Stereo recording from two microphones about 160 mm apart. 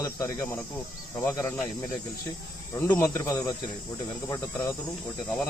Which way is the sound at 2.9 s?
15° left (ahead or behind).